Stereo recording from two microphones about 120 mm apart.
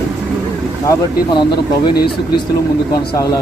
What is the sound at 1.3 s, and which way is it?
Speech, 40° left (ahead or behind).